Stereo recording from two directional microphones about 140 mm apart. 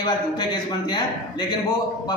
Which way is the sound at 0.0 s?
30° left (ahead or behind).